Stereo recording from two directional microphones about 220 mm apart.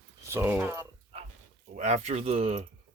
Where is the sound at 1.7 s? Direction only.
30° right (ahead or behind).